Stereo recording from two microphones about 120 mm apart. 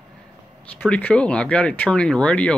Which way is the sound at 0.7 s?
10° left (ahead or behind).